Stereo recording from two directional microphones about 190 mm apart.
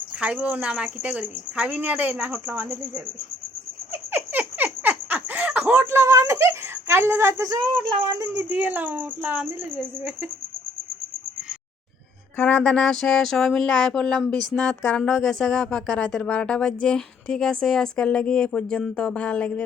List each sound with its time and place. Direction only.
0.2 s speech: 5° right (ahead or behind)
4.1 s a sound: 10° right (ahead or behind)
8.2 s speech: 10° right (ahead or behind)
12.4 s speech: 5° left (ahead or behind)